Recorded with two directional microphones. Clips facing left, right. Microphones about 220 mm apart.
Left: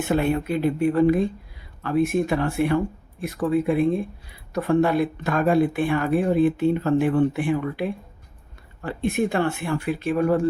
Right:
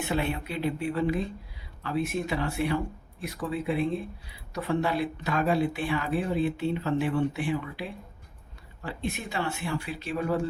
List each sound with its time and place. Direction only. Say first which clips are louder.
0.0 s speech: left 8 dB; 45° left (ahead or behind)